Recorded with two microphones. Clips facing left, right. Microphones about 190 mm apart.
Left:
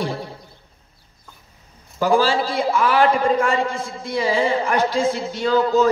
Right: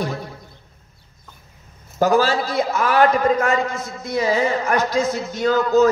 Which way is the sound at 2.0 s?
45° right (ahead or behind).